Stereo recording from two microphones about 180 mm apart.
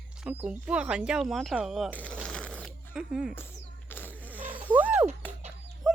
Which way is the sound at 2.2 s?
5° left (ahead or behind).